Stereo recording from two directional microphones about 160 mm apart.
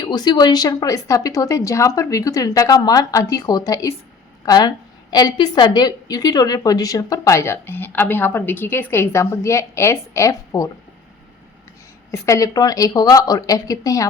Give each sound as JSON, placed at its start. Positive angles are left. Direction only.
{"t": 0.0, "sound": "a woman's voice", "side_deg": 25}
{"t": 12.1, "sound": "a woman's voice", "side_deg": 20}